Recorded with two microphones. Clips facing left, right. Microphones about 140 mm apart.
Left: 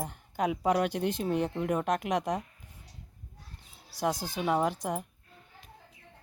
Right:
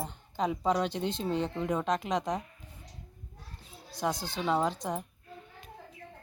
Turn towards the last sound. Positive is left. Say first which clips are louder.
# left 1 dB
turn(degrees=10)  # may be behind; listen again after turning